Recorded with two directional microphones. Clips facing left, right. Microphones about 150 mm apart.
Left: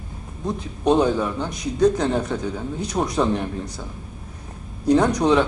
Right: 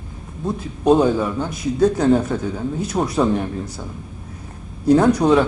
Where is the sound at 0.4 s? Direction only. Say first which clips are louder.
Right 4 dB; 5° right (ahead or behind).